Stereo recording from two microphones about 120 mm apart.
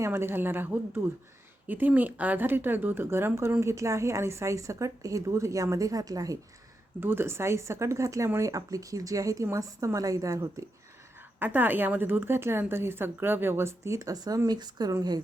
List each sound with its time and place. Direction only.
0.0 s speech: 20° right (ahead or behind)
7.0 s speech: 20° right (ahead or behind)
11.3 s speech: 15° right (ahead or behind); by 14.9 s 35° right (ahead or behind)